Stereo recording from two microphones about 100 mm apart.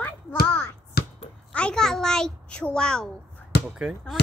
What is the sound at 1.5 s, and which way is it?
A child's voice, 10° left (ahead or behind).